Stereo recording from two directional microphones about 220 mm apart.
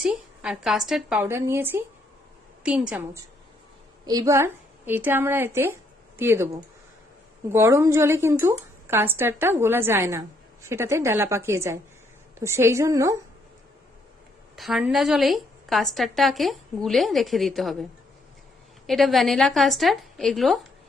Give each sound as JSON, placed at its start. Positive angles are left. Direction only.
{"t": 0.0, "sound": "a woman's voice", "side_deg": -5}
{"t": 14.5, "sound": "a woman's voice", "side_deg": 0}
{"t": 18.9, "sound": "a woman's voice", "side_deg": 0}